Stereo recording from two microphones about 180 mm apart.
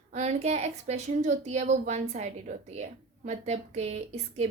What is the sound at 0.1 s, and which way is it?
A woman's voice, 40° right (ahead or behind).